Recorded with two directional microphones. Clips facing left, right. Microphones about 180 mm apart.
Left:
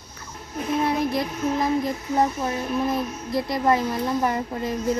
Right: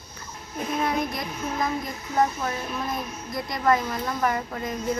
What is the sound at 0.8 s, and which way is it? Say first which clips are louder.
A child's voice: left 4 dB; 30° left (ahead or behind).